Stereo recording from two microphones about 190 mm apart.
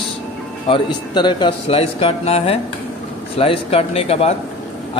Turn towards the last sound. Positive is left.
turn(degrees=35)  # may be behind; listen again after turning